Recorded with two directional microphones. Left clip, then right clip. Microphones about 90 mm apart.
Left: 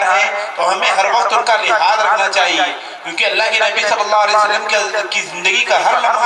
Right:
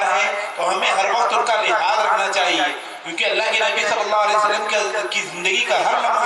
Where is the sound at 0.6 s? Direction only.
30° left (ahead or behind).